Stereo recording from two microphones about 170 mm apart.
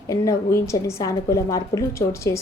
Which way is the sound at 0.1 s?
20° left (ahead or behind).